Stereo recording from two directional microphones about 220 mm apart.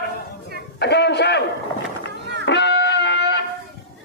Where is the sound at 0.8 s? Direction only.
50° left (ahead or behind).